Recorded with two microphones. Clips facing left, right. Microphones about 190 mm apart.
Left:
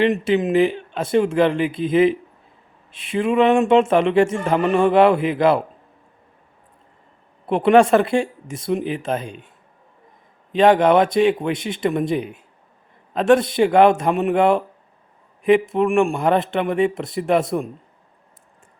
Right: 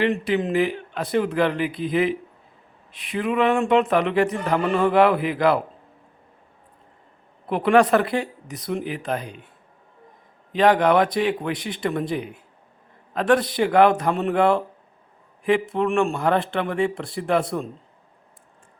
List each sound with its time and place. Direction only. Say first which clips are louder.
0.0 s speech: left 4 dB; 20° left (ahead or behind)
7.4 s speech: left 4 dB; 25° left (ahead or behind)
10.5 s speech: left 3 dB; 25° left (ahead or behind)